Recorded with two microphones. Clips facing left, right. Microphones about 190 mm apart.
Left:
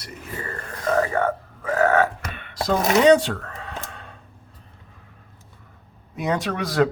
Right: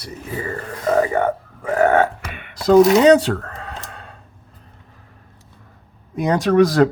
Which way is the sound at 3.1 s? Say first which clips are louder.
Right 3 dB; 40° right (ahead or behind).